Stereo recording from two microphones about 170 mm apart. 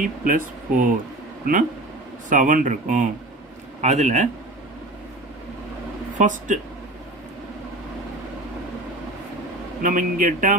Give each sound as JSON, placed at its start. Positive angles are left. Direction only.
{"t": 0.0, "sound": "speech", "side_deg": -50}
{"t": 6.1, "sound": "speech", "side_deg": -45}
{"t": 9.8, "sound": "speech", "side_deg": -50}